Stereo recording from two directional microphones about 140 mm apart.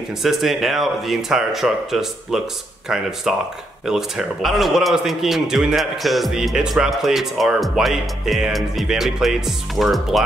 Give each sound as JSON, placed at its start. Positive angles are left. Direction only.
{"t": 0.2, "sound": "a man's voice", "side_deg": 0}